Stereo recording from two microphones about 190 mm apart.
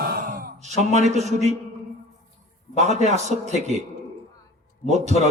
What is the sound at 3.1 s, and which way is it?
Speech, 35° right (ahead or behind).